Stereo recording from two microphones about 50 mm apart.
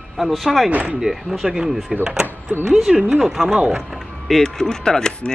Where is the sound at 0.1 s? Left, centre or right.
Centre.